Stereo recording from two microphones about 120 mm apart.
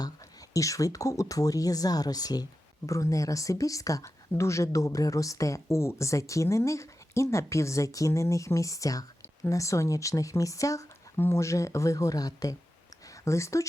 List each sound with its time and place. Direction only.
0.5 s speech: 30° left (ahead or behind)